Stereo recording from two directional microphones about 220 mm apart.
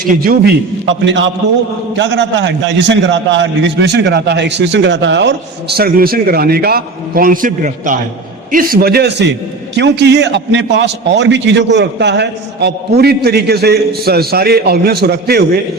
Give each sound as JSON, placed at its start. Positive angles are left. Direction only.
{"t": 0.0, "sound": "a man's voice", "side_deg": -40}
{"t": 1.0, "sound": "a man's voice", "side_deg": -55}